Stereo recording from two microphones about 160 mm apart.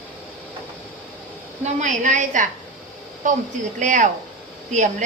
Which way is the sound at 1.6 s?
50° right (ahead or behind).